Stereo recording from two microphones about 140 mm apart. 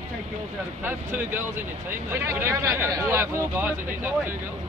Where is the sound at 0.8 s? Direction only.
15° right (ahead or behind).